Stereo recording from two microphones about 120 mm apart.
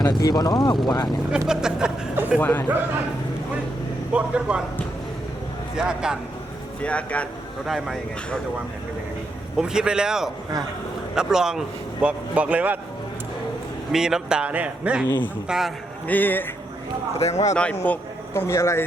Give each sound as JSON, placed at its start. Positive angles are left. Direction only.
{"t": 0.0, "sound": "speech", "side_deg": 35}
{"t": 1.5, "sound": "a man's voice", "side_deg": -5}
{"t": 2.4, "sound": "a man's voice", "side_deg": 15}
{"t": 4.1, "sound": "a man's voice", "side_deg": -10}
{"t": 5.7, "sound": "a man's voice", "side_deg": -5}
{"t": 6.8, "sound": "a man's voice", "side_deg": 10}
{"t": 7.7, "sound": "a man's voice", "side_deg": 0}
{"t": 9.6, "sound": "a man's voice", "side_deg": -5}
{"t": 13.9, "sound": "a man's voice", "side_deg": -5}
{"t": 16.0, "sound": "a man's voice", "side_deg": 15}
{"t": 17.2, "sound": "speech", "side_deg": 65}
{"t": 17.5, "sound": "a man's voice", "side_deg": 10}